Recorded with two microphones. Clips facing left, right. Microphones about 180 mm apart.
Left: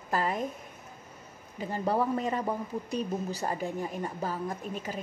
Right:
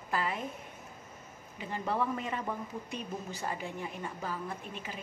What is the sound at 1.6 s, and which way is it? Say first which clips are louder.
Speech: left 5 dB; 40° left (ahead or behind).